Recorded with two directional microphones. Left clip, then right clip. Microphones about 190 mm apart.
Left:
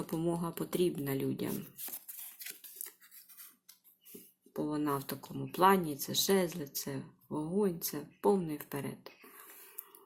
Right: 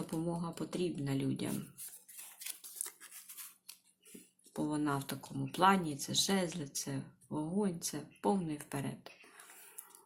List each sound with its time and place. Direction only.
0.1 s speech: 20° left (ahead or behind)
4.5 s speech: 5° left (ahead or behind)